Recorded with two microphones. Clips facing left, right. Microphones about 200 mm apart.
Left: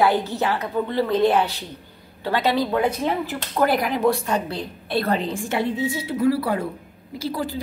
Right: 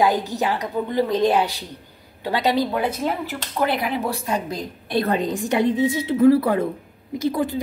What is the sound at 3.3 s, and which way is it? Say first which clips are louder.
Speech: left 2 dB; centre (ahead or behind).